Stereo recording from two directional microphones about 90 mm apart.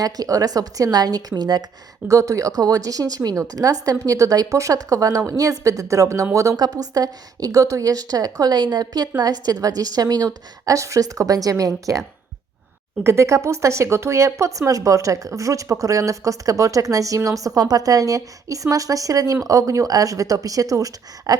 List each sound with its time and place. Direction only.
0.0 s a woman's voice: 45° right (ahead or behind)
2.0 s a woman's voice: 40° right (ahead or behind)
13.0 s speech: 30° right (ahead or behind)